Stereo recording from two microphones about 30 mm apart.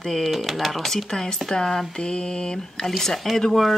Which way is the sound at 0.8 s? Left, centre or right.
Centre.